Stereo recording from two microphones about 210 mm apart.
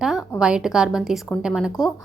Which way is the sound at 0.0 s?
5° right (ahead or behind).